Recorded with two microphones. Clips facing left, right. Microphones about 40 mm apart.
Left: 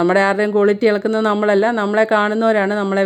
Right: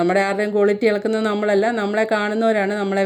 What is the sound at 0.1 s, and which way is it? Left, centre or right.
A woman's voice, left.